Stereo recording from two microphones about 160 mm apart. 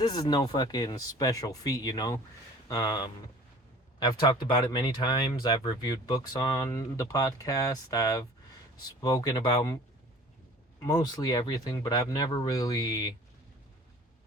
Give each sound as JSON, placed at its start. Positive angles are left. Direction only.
{"t": 0.1, "sound": "speech", "side_deg": 25}
{"t": 10.8, "sound": "speech", "side_deg": 25}